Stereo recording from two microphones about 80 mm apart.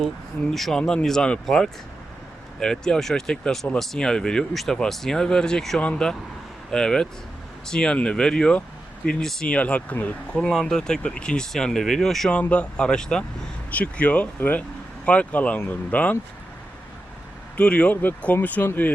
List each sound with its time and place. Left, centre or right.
0.5 s speech: centre
12.3 s speech: centre
17.6 s speech: centre